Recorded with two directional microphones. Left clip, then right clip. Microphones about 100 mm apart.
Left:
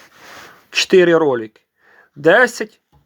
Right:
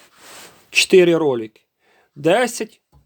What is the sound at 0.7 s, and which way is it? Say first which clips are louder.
Speech: left 1 dB; 25° right (ahead or behind).